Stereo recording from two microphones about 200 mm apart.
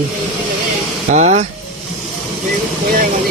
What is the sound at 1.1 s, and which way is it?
Speech, 35° right (ahead or behind).